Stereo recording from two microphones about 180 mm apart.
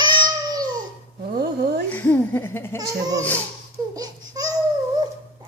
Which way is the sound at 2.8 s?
20° right (ahead or behind).